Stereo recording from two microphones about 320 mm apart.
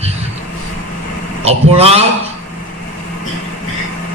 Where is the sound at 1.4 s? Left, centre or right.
Centre.